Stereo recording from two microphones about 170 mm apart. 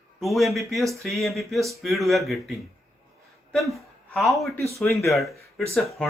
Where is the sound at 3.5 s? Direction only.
Centre (ahead or behind).